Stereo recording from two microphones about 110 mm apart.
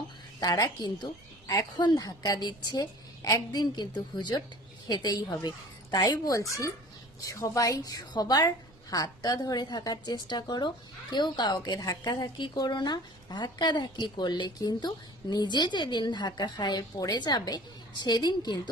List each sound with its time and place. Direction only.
0.3 s a woman's voice: 35° left (ahead or behind)